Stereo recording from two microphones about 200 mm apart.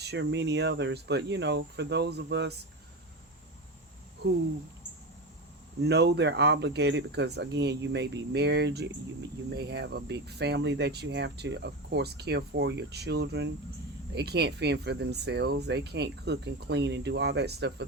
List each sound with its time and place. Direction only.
0.0 s speech: 60° right (ahead or behind)
5.8 s speech: 55° right (ahead or behind)